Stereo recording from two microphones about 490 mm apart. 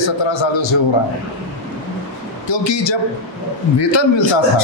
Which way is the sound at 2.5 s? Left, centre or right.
Left.